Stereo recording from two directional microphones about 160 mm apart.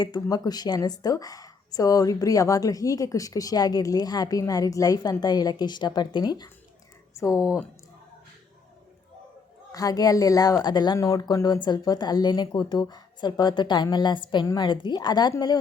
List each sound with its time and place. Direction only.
0.0 s a woman's voice: 25° left (ahead or behind)
7.3 s speech: 5° right (ahead or behind)
9.7 s a woman's voice: 20° left (ahead or behind)